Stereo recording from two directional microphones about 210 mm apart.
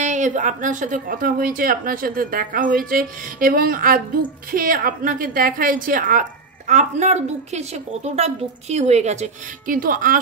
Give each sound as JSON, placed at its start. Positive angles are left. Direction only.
{"t": 0.0, "sound": "speech", "side_deg": -35}